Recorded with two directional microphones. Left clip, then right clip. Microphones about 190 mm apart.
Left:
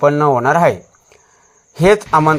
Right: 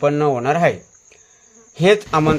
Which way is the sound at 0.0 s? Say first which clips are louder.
Left 5 dB; 10° left (ahead or behind).